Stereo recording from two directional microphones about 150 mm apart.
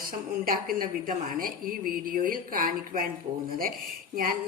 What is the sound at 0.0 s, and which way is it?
A woman's voice, 70° right (ahead or behind).